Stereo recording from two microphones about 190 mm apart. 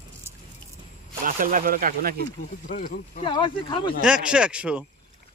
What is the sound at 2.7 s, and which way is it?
Speech, 45° left (ahead or behind).